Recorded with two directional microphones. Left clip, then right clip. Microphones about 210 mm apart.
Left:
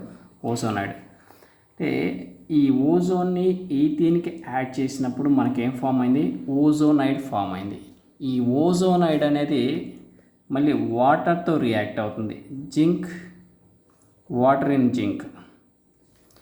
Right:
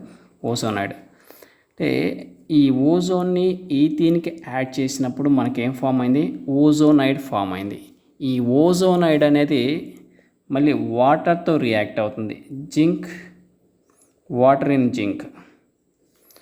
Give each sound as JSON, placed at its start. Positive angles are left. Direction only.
{"t": 0.4, "sound": "speech", "side_deg": -30}
{"t": 14.3, "sound": "speech", "side_deg": -25}